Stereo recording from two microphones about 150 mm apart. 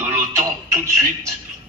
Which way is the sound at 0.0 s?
20° right (ahead or behind).